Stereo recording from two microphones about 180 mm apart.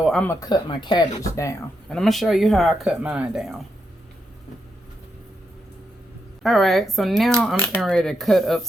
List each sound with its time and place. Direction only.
0.0 s a sound: 5° left (ahead or behind)
0.3 s speech: 20° left (ahead or behind)
1.9 s speech: centre (ahead or behind)
6.4 s speech: centre (ahead or behind)